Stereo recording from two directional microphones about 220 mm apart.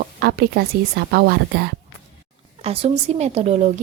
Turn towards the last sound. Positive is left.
turn(degrees=-30)  # may be behind; listen again after turning